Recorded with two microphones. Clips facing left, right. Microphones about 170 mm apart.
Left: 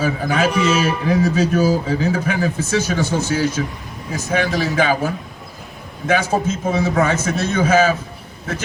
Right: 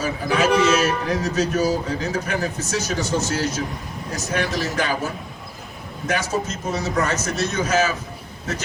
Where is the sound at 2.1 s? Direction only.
55° left (ahead or behind).